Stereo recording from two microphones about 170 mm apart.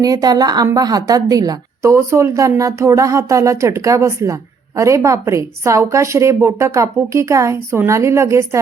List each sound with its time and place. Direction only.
0.0 s a woman's voice: 20° right (ahead or behind)